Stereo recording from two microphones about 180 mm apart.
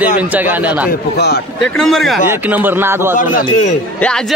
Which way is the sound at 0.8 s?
60° left (ahead or behind).